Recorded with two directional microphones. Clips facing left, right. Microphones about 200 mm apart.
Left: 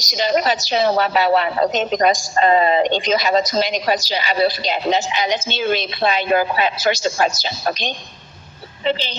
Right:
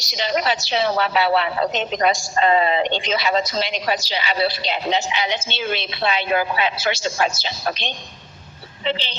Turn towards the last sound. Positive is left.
turn(degrees=40)  # may be behind; listen again after turning